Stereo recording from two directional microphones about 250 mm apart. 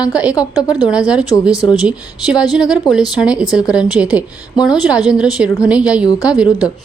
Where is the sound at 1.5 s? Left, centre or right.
Centre.